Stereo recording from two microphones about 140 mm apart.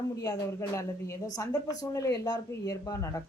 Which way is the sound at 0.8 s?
20° left (ahead or behind).